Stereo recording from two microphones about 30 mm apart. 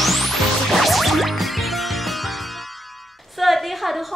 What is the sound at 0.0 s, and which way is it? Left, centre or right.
Music, centre.